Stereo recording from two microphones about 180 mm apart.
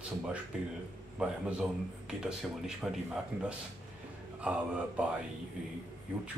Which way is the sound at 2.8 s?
Centre (ahead or behind).